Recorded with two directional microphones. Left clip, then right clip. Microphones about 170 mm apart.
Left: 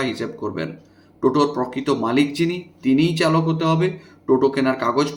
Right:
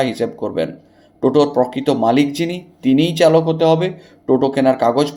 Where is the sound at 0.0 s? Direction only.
30° right (ahead or behind).